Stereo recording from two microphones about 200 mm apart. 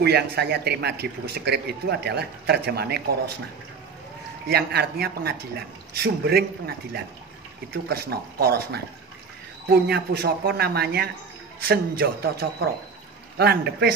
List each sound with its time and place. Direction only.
0.0 s a man's voice: 55° right (ahead or behind)
4.5 s a man's voice: 50° right (ahead or behind)